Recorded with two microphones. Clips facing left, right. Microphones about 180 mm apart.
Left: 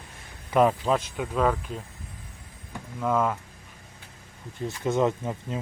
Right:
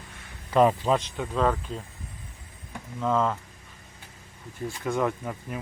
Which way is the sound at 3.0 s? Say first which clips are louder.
Even; 10° left (ahead or behind).